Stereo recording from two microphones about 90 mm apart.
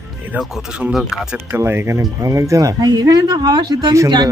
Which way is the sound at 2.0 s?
40° right (ahead or behind).